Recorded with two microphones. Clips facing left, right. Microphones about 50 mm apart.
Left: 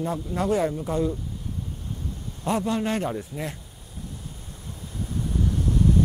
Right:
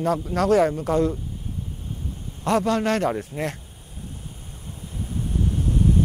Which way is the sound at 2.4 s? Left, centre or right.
Right.